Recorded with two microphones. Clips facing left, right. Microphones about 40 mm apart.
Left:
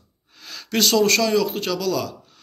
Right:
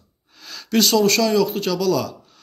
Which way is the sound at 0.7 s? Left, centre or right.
Left.